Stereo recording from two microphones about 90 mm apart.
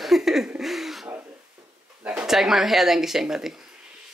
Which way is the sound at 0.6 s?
Centre (ahead or behind).